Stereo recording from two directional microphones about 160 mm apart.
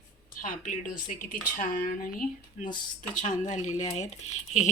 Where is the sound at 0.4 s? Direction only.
55° left (ahead or behind).